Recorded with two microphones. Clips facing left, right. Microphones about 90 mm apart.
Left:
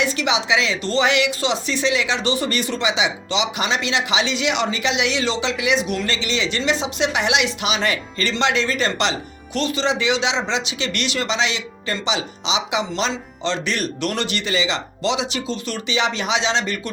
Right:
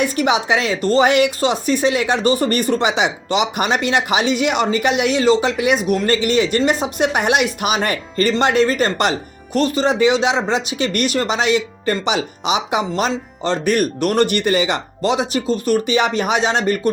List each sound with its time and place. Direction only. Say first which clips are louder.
0.0 s speech: right 4 dB; 45° right (ahead or behind)